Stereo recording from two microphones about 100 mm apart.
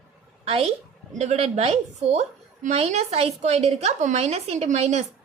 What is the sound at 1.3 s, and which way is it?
A woman's voice, 90° right.